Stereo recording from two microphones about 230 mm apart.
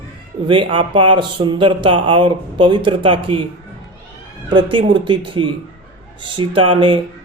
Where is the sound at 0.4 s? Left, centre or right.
Right.